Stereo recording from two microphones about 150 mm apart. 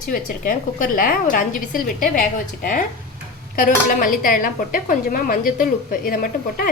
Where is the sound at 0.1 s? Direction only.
70° left (ahead or behind).